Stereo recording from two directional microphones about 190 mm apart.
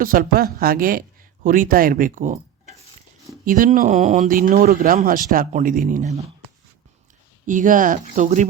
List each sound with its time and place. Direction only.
0.0 s speech: 50° right (ahead or behind)
3.4 s speech: 45° right (ahead or behind)
7.4 s speech: 45° right (ahead or behind)